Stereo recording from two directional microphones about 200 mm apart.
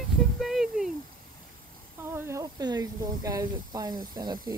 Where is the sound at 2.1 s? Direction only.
15° right (ahead or behind).